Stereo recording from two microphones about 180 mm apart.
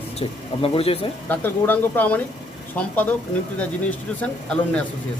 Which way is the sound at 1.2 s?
10° left (ahead or behind).